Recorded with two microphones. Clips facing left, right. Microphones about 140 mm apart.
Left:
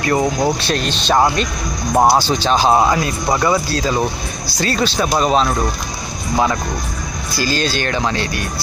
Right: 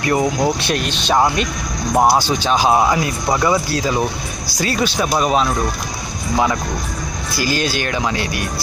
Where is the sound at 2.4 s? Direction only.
10° right (ahead or behind).